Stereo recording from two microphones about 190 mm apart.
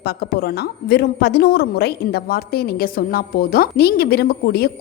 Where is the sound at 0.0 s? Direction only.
55° left (ahead or behind).